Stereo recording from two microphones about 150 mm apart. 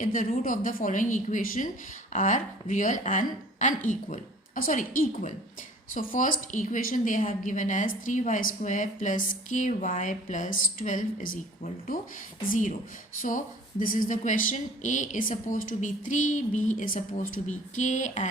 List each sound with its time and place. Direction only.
0.0 s speech: 60° left (ahead or behind)